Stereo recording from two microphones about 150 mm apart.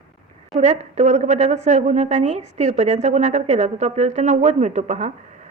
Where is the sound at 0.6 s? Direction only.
50° right (ahead or behind).